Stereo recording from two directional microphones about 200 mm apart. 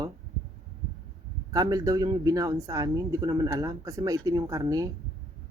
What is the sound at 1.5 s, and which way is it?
Speech, 15° right (ahead or behind).